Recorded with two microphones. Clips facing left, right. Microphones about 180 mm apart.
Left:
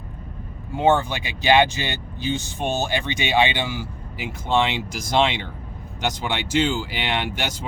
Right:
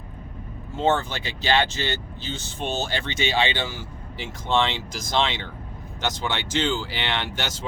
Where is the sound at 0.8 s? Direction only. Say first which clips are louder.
Left 4 dB; 15° left (ahead or behind).